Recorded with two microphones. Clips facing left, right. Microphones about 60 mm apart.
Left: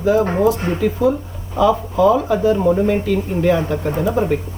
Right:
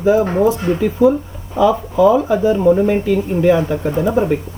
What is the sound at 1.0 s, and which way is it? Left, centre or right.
Speech, right.